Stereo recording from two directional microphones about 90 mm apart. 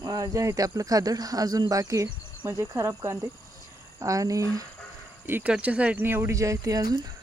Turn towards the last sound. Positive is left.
turn(degrees=-45)  # may be behind; listen again after turning